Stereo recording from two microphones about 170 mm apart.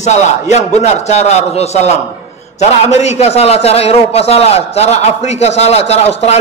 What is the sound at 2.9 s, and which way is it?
A man's voice, 40° left (ahead or behind).